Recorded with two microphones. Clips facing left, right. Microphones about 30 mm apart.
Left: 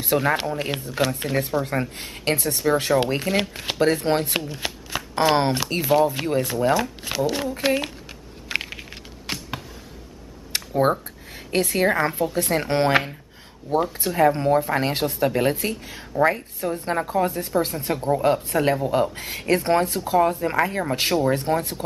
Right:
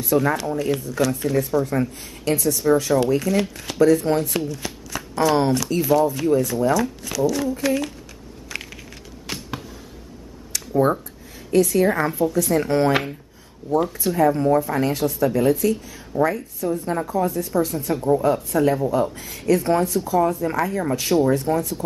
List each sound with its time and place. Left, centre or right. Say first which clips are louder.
0.0 s speech: right 1 dB; left
8.5 s a sound: left 6 dB; left
9.3 s basketball bounce: left 1 dB; left
10.5 s a sound: left 2 dB; left
11.5 s speech: right 4 dB; left
11.9 s speech: right 1 dB; left
13.9 s speech: left 1 dB; left